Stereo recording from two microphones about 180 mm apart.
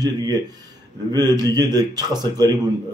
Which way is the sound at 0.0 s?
20° right (ahead or behind).